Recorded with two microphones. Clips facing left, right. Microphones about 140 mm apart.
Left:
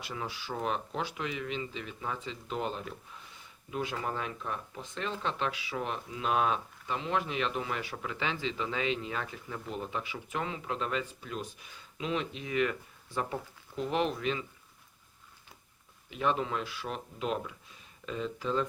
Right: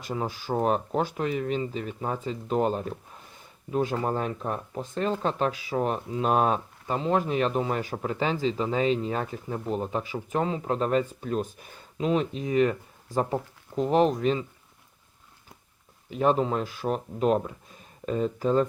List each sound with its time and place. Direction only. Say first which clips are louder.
0.0 s speech: right 8 dB; 40° right (ahead or behind)
16.0 s speech: right 7 dB; 40° right (ahead or behind)